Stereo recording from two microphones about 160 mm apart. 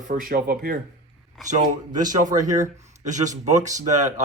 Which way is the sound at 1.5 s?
50° right (ahead or behind).